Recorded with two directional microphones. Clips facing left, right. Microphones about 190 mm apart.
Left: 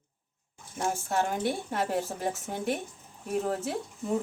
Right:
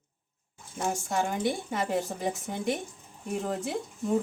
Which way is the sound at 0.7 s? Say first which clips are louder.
Even; 5° left (ahead or behind).